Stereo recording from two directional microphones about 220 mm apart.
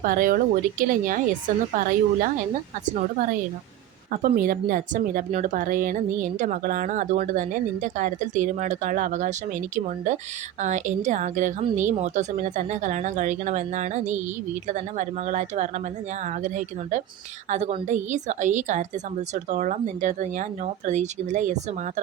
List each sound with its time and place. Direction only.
0.0 s speech: 40° right (ahead or behind)